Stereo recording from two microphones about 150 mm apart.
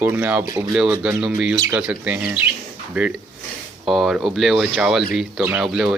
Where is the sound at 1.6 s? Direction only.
15° right (ahead or behind).